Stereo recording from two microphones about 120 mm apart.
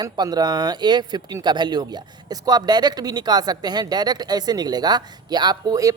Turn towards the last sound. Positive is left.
turn(degrees=-30)  # may be behind; listen again after turning